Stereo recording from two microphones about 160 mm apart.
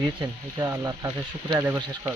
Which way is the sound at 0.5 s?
20° right (ahead or behind).